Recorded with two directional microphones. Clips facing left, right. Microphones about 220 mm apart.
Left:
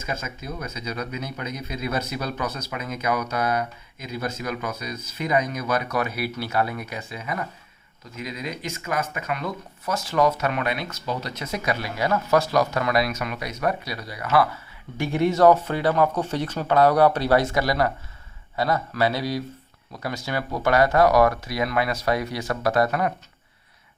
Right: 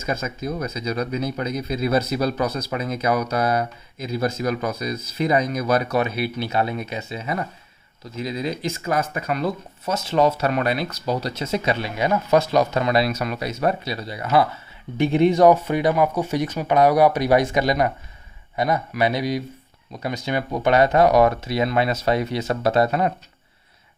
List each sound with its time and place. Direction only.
0.3 s speech: 40° right (ahead or behind)
6.0 s speech: 25° right (ahead or behind)
9.9 s speech: 25° right (ahead or behind)